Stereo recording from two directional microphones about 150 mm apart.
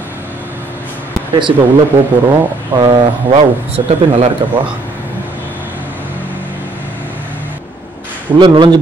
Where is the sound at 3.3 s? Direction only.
40° right (ahead or behind).